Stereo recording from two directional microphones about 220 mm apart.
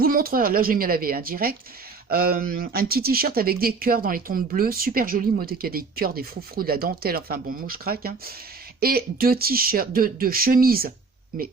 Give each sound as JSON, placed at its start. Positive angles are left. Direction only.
{"t": 0.0, "sound": "speech", "side_deg": -40}